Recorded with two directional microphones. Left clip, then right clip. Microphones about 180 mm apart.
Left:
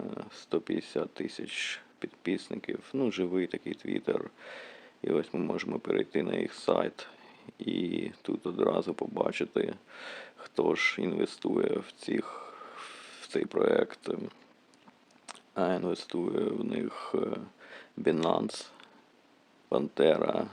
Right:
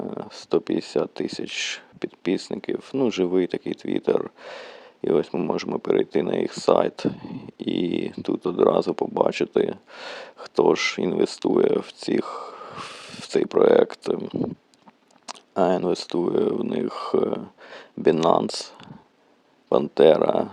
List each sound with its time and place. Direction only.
0.0 s speech: 30° right (ahead or behind)
15.3 s a sound: 35° right (ahead or behind)
15.9 s speech: 35° right (ahead or behind)
19.7 s speech: 35° right (ahead or behind)